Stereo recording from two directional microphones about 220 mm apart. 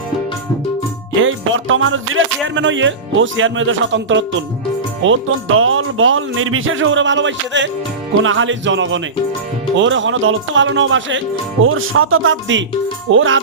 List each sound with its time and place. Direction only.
1.2 s speech: 65° right (ahead or behind)